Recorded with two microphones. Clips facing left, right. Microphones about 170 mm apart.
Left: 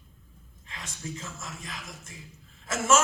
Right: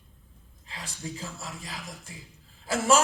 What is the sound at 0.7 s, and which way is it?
A man's voice, 35° right (ahead or behind).